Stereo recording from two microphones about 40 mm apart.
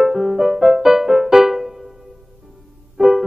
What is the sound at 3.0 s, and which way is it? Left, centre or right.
Music, centre.